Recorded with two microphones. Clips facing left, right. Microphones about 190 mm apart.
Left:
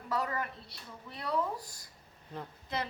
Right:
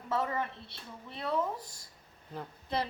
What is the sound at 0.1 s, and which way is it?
Speech, 25° right (ahead or behind).